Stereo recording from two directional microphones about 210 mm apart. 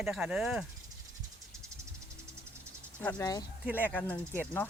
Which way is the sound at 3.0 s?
10° left (ahead or behind).